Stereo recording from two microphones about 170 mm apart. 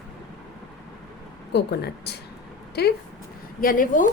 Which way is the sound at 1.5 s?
75° left (ahead or behind).